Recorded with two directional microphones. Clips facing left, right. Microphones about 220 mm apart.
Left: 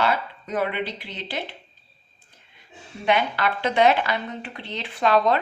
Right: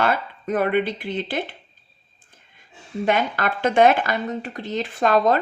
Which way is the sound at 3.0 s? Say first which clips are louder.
Even; 45° right (ahead or behind).